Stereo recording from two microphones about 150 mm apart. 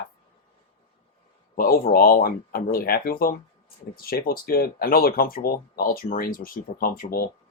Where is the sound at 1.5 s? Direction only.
75° left (ahead or behind).